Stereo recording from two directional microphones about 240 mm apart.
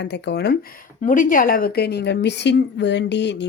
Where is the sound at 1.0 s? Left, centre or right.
Left.